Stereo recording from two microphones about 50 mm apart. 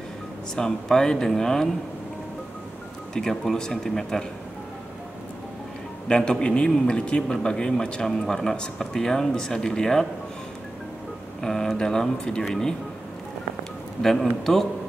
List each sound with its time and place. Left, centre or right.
0.6 s speech: centre
3.2 s speech: centre
6.0 s a man's voice: centre
11.4 s speech: centre
14.4 s speech: centre